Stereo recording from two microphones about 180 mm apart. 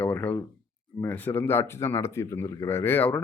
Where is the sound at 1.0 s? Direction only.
10° left (ahead or behind).